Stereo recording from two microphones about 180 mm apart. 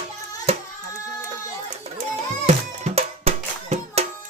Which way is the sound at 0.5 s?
35° right (ahead or behind).